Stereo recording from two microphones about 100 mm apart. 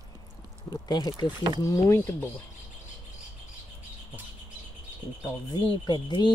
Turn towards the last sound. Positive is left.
turn(degrees=45)  # may be behind; listen again after turning